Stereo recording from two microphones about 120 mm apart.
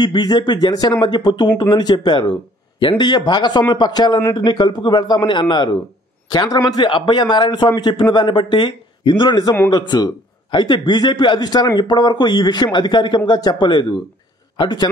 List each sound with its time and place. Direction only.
0.0 s speech: 40° left (ahead or behind)